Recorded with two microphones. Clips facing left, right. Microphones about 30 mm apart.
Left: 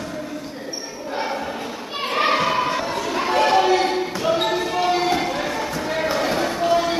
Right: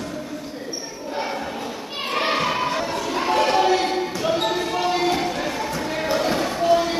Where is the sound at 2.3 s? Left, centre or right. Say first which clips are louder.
Left 2 dB; centre.